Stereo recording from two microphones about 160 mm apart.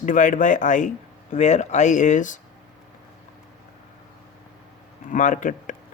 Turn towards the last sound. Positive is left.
turn(degrees=50)  # may be behind; listen again after turning